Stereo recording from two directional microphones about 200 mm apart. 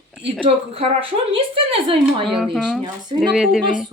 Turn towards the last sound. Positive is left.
turn(degrees=0)  # may be behind; listen again after turning